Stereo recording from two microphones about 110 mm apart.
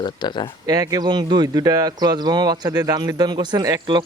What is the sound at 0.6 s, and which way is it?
Speech, 35° right (ahead or behind).